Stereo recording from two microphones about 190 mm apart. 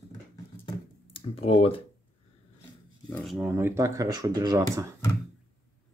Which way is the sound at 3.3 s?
10° right (ahead or behind).